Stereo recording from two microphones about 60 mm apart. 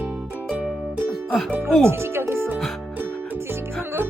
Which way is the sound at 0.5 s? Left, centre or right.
Right.